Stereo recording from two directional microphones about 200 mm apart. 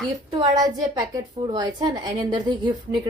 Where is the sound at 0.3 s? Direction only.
20° right (ahead or behind).